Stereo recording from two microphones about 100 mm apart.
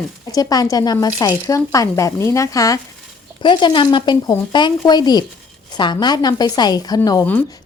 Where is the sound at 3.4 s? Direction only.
50° left (ahead or behind).